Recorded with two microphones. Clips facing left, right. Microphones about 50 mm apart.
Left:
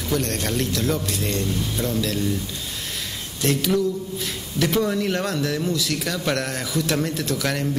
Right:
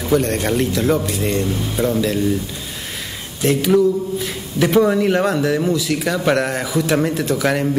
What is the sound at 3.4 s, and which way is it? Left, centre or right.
A man's voice, centre.